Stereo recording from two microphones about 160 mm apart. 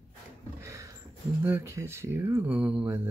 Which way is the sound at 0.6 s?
20° right (ahead or behind).